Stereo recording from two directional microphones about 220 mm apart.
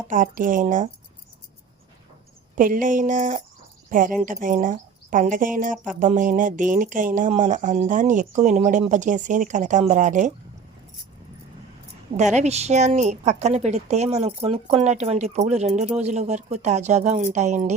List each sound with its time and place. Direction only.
0.1 s a woman's voice: 35° right (ahead or behind)
2.6 s a woman's voice: 40° right (ahead or behind)
5.7 s speech: 5° right (ahead or behind)
6.0 s a woman's voice: 35° right (ahead or behind)
12.1 s a woman's voice: 30° right (ahead or behind)